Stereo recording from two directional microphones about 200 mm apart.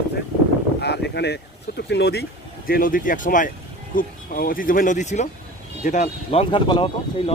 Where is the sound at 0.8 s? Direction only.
55° left (ahead or behind).